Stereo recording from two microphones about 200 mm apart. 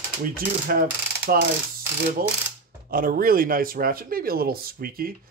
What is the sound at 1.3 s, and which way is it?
Speech, 50° right (ahead or behind).